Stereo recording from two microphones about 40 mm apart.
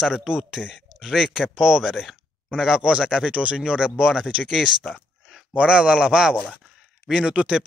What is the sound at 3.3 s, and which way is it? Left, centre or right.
Speech, right.